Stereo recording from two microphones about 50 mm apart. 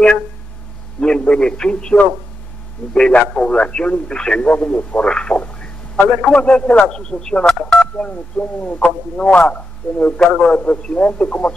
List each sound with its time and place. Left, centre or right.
1.0 s a man's voice: left
8.1 s speech: left
10.1 s a man's voice: centre
10.6 s speech: left